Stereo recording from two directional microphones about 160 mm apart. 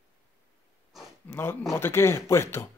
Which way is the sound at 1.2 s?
15° left (ahead or behind).